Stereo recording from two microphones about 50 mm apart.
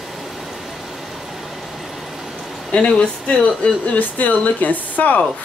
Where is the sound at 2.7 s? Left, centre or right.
Centre.